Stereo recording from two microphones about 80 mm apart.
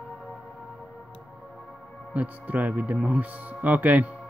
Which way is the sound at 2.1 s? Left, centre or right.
Centre.